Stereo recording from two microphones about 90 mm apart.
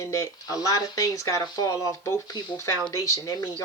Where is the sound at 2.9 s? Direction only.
35° left (ahead or behind).